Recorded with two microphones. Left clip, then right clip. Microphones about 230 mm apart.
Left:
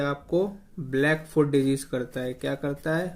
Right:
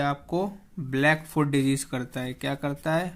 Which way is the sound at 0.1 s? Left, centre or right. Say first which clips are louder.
Left 2 dB; right.